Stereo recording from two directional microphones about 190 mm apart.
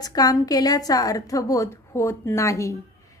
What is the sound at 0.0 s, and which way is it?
A woman's voice, 20° left (ahead or behind).